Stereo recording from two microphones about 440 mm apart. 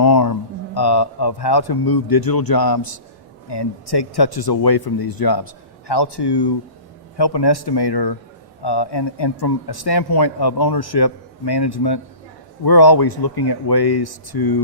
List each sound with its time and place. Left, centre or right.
0.0 s speech: left